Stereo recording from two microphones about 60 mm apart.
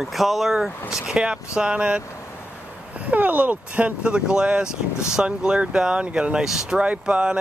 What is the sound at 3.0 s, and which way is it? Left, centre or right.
Speech, right.